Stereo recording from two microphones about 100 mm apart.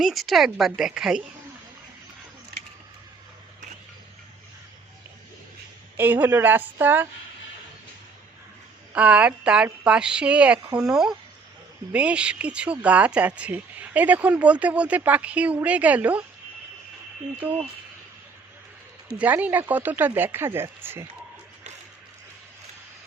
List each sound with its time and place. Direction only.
0.0 s speech: centre (ahead or behind)
6.0 s speech: 20° right (ahead or behind)
8.9 s speech: 15° right (ahead or behind)
19.1 s speech: 15° right (ahead or behind)